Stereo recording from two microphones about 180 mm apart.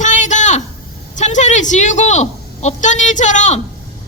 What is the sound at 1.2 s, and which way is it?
A woman's voice, 40° left (ahead or behind).